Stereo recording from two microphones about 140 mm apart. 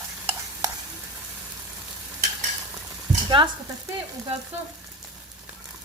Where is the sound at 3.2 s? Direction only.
35° right (ahead or behind).